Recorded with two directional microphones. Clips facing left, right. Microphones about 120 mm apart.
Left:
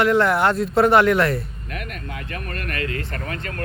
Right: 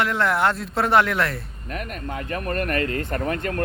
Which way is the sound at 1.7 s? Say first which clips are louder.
Right 3 dB; 40° right (ahead or behind).